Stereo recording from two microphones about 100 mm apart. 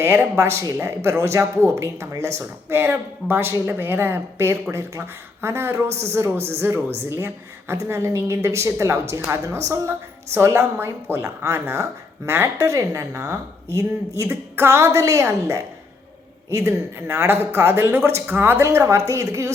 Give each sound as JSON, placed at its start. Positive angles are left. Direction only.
{"t": 0.0, "sound": "a woman's voice", "side_deg": -20}